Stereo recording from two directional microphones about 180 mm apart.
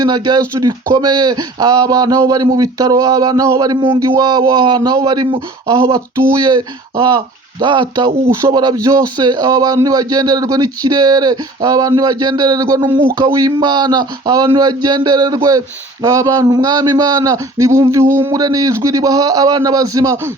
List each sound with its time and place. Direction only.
0.0 s speech: 25° right (ahead or behind)